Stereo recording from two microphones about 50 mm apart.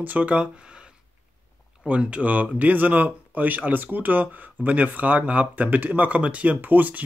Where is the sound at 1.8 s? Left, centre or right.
Right.